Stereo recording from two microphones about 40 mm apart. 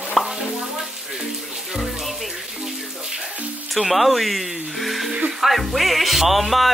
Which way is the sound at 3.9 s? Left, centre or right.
Centre.